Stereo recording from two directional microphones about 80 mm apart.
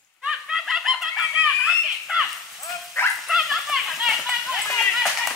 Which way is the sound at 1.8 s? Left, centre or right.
Centre.